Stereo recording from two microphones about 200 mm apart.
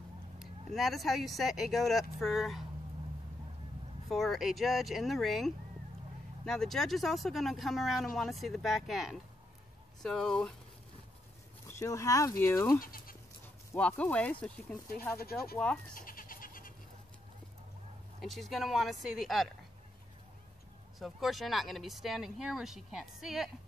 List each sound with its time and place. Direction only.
0.4 s speech: centre (ahead or behind)
4.1 s speech: centre (ahead or behind)
11.6 s speech: 15° left (ahead or behind)
12.8 s speech: 45° left (ahead or behind)
13.7 s speech: 5° left (ahead or behind)
15.9 s goat: 45° left (ahead or behind)
18.2 s speech: centre (ahead or behind)
21.0 s speech: centre (ahead or behind)